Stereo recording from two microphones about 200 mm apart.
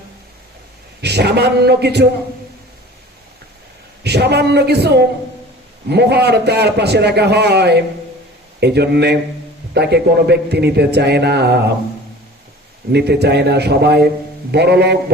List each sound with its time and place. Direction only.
1.0 s a man's voice: 55° right (ahead or behind)
4.0 s a man's voice: 55° right (ahead or behind)
12.9 s a man's voice: 55° right (ahead or behind)